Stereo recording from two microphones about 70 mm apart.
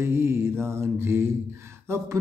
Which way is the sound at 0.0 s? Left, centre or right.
Right.